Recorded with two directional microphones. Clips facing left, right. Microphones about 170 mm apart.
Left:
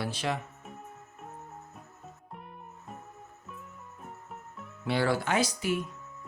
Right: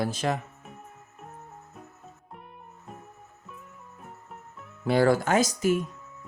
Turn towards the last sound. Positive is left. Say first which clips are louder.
# right 5 dB
turn(degrees=-45)  # may be behind; listen again after turning